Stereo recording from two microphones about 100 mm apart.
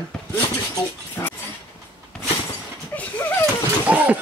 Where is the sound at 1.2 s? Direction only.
30° left (ahead or behind).